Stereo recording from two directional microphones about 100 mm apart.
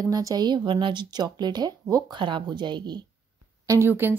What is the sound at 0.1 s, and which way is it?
A woman's voice, 40° right (ahead or behind).